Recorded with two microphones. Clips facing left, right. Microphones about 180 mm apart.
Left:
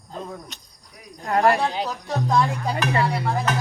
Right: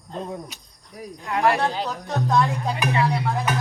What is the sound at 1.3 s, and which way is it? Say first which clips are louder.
Speech: left 4 dB; 40° left (ahead or behind).